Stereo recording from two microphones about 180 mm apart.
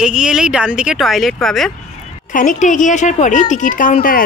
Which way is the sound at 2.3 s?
45° left (ahead or behind).